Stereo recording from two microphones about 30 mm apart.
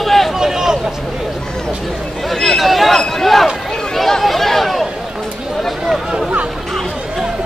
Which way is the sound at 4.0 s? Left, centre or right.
Centre.